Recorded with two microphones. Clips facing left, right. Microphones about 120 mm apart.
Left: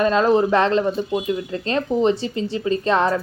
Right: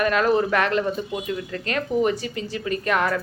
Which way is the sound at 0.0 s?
25° left (ahead or behind).